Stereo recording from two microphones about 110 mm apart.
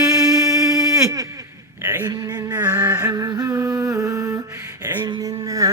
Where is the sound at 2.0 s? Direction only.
35° right (ahead or behind).